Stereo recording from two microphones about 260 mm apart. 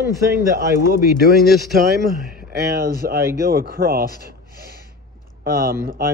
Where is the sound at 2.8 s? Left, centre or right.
Right.